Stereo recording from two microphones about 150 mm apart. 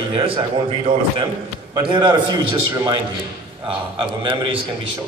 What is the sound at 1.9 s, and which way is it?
A man's voice, 30° right (ahead or behind).